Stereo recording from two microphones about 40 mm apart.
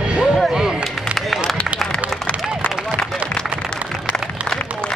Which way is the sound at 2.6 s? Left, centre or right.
Left.